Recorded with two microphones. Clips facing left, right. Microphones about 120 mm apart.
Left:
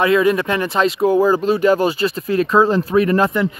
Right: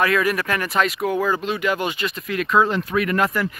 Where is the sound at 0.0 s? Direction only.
25° left (ahead or behind).